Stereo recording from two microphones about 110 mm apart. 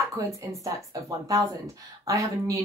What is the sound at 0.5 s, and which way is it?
A woman's voice, 30° right (ahead or behind).